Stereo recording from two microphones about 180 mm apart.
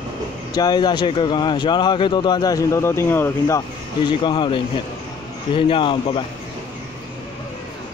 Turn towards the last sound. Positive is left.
turn(degrees=30)  # may be behind; listen again after turning